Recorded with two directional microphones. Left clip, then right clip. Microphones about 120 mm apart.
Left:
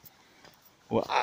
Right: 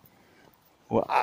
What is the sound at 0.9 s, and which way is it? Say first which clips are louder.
Speech: right 3 dB; 30° right (ahead or behind).